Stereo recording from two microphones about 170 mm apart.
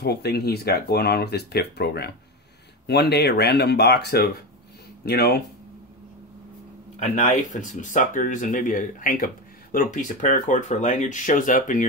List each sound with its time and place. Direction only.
0.0 s speech: 70° left (ahead or behind)
7.0 s speech: 45° left (ahead or behind)